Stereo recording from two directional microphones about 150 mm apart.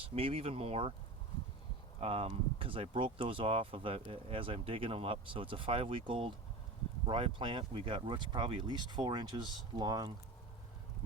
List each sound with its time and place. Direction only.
0.0 s speech: 40° right (ahead or behind)
2.0 s speech: 40° right (ahead or behind)